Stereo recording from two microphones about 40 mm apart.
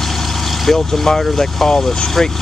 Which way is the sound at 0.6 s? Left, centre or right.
Centre.